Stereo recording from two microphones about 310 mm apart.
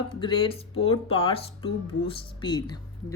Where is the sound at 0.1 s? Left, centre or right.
Centre.